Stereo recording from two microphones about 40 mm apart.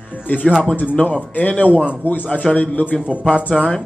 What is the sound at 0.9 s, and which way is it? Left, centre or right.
Speech, left.